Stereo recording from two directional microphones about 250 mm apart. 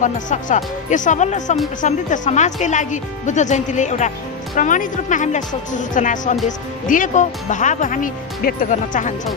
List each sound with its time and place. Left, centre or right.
0.0 s speech: left